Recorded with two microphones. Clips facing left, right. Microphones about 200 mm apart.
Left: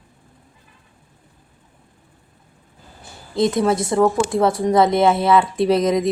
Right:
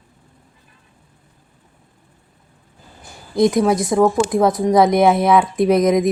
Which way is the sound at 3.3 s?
15° right (ahead or behind).